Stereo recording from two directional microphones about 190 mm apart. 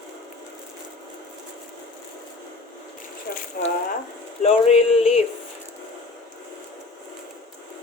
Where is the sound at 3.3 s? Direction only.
50° left (ahead or behind).